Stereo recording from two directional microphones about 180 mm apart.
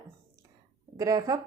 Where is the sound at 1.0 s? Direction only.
20° right (ahead or behind).